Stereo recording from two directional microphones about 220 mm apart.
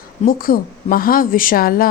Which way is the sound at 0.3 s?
40° left (ahead or behind).